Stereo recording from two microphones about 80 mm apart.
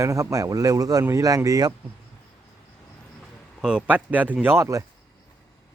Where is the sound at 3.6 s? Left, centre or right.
Centre.